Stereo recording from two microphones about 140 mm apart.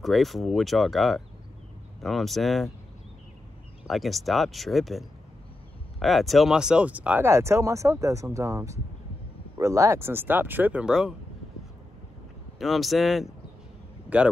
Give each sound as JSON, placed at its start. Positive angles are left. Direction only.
{"t": 0.0, "sound": "speech", "side_deg": 0}
{"t": 3.8, "sound": "speech", "side_deg": 0}
{"t": 12.5, "sound": "speech", "side_deg": 0}